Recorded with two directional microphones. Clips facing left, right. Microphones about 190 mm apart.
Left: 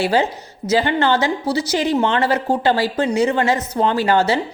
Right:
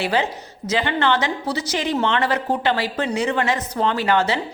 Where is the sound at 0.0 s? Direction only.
30° left (ahead or behind).